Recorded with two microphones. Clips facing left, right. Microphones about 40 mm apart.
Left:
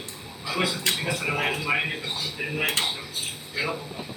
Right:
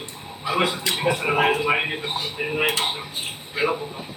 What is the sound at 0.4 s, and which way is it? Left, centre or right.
Speech, right.